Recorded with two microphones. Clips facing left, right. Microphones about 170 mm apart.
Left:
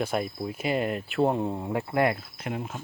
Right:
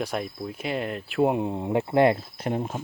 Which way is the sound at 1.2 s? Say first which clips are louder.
Right 2 dB; 15° right (ahead or behind).